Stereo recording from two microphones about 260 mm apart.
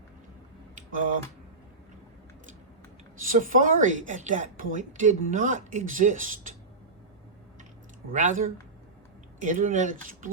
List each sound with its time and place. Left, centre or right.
0.8 s a sound: right
3.2 s a woman's voice: right
8.1 s a woman's voice: right